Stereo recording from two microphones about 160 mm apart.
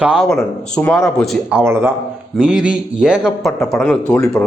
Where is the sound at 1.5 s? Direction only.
15° right (ahead or behind).